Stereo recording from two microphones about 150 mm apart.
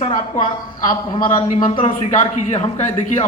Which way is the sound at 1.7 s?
40° left (ahead or behind).